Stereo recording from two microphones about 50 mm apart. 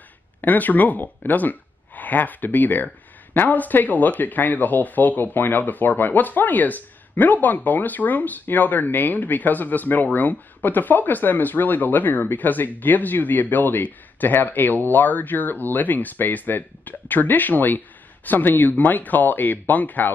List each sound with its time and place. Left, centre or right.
0.4 s speech: left